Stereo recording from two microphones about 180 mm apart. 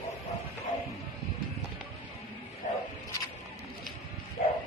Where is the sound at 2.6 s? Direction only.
45° left (ahead or behind).